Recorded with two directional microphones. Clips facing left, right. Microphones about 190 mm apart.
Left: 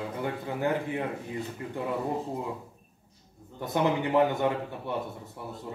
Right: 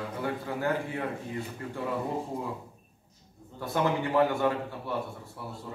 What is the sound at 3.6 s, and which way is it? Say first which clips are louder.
Speech: left 1 dB; 20° left (ahead or behind).